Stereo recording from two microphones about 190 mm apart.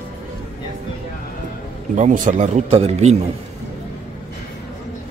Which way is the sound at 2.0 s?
40° right (ahead or behind).